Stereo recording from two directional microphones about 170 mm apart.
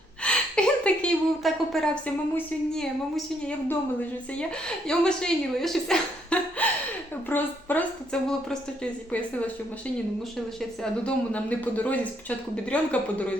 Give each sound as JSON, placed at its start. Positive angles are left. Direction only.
{"t": 0.2, "sound": "a sound", "side_deg": 5}
{"t": 2.3, "sound": "a woman's voice", "side_deg": 5}
{"t": 4.4, "sound": "a woman's voice", "side_deg": 5}
{"t": 11.0, "sound": "speech", "side_deg": 10}